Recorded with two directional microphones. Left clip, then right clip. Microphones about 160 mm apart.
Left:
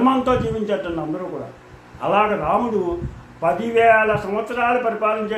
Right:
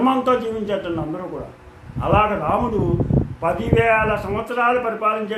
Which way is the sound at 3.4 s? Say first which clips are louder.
Left 3 dB; 10° right (ahead or behind).